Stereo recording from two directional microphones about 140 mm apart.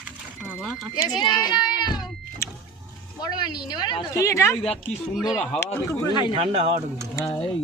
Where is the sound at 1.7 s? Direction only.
30° left (ahead or behind).